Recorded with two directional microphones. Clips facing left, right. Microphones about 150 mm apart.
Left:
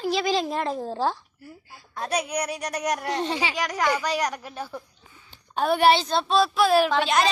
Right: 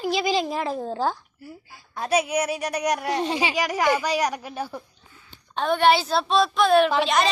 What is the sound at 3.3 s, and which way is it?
Speech, 20° right (ahead or behind).